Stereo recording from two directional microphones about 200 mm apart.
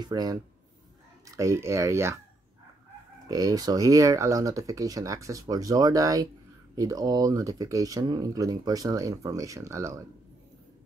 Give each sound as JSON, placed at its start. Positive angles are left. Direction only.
{"t": 0.0, "sound": "speech", "side_deg": -20}
{"t": 3.3, "sound": "speech", "side_deg": -20}